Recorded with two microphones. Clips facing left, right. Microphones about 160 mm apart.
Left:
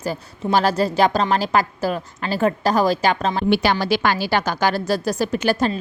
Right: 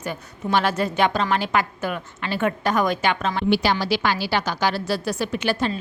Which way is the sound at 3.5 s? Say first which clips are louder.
Left 2 dB; 55° left (ahead or behind).